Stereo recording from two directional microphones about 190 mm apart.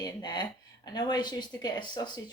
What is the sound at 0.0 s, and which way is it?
A woman's voice, 20° left (ahead or behind).